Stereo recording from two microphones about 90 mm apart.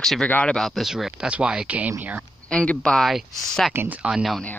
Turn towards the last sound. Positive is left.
turn(degrees=0)  # may be behind; listen again after turning